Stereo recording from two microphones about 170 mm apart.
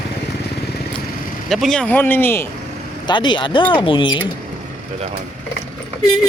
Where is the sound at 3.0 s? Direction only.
25° left (ahead or behind).